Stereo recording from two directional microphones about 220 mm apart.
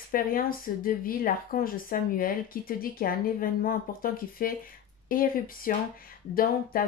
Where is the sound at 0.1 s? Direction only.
40° left (ahead or behind).